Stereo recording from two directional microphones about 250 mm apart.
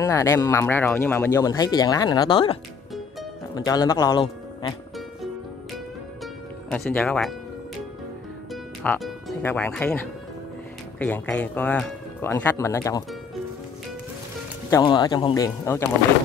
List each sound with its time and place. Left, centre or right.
0.0 s speech: centre
6.7 s speech: centre
8.8 s speech: centre
14.7 s speech: centre